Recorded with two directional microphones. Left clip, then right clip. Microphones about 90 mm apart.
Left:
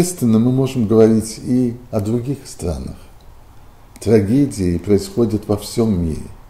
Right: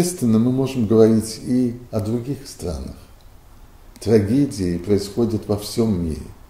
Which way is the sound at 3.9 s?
15° left (ahead or behind).